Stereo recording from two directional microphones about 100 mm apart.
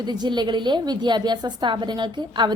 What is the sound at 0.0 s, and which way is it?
A woman's voice, 45° right (ahead or behind).